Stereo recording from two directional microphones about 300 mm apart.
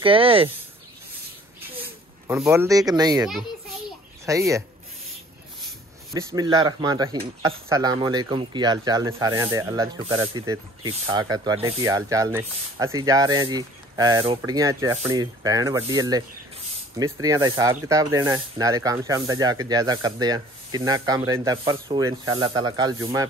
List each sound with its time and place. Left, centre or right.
0.0 s speech: centre
2.2 s speech: centre
4.3 s speech: centre
6.1 s speech: centre